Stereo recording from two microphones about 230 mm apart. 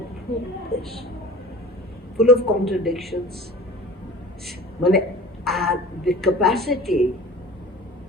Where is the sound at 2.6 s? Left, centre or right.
Centre.